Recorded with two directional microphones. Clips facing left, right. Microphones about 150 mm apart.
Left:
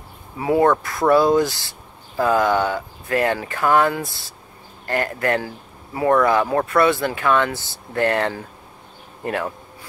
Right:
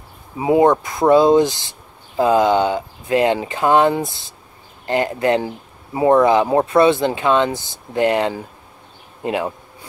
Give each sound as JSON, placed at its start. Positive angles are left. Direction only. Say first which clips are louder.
{"t": 0.4, "sound": "speech", "louder": "right 3 dB", "side_deg": -20}